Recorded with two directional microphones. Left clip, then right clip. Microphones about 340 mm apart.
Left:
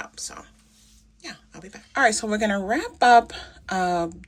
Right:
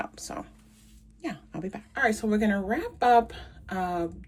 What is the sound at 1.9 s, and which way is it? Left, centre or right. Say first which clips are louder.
A woman's voice: left 5 dB; centre.